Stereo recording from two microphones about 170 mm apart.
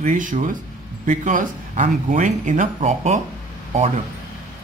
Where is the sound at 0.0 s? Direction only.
50° right (ahead or behind).